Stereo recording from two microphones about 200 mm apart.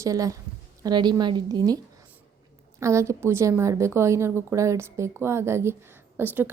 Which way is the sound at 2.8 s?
15° right (ahead or behind).